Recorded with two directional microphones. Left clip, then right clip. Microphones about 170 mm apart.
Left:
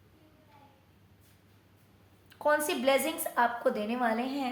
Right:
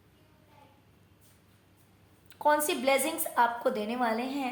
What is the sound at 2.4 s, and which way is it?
A woman's voice, 25° right (ahead or behind).